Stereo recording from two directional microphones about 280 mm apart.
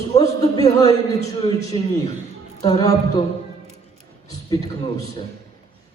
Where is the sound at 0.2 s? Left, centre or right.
Centre.